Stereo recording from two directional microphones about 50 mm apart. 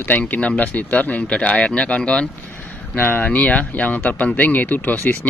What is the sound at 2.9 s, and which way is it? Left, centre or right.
Speech, left.